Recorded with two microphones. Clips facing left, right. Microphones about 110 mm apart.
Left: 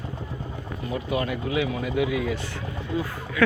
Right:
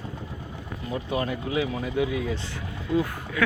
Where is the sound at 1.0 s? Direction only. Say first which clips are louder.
Left 1 dB; 30° right (ahead or behind).